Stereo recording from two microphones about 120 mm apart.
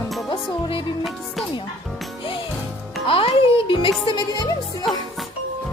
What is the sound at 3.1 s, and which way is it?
A child's voice, 50° left (ahead or behind).